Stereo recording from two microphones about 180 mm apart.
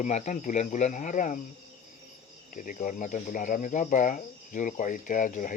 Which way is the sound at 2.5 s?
50° left (ahead or behind).